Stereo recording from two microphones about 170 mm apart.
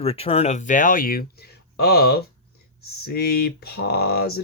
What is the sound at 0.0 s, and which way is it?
Speech, 35° left (ahead or behind).